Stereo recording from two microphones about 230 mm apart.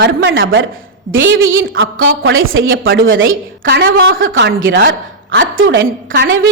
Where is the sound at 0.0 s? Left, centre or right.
Right.